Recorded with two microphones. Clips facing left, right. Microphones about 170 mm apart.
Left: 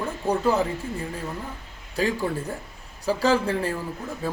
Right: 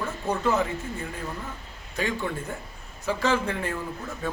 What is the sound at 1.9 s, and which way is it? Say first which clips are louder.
A man's voice: left 4 dB; 35° left (ahead or behind).